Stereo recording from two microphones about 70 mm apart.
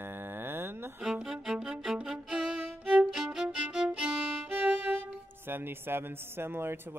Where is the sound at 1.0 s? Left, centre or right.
Centre.